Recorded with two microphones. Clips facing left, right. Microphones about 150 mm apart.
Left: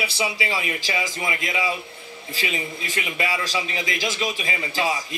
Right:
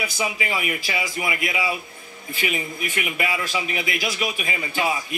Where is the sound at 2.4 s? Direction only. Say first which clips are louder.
Right 2 dB; 30° left (ahead or behind).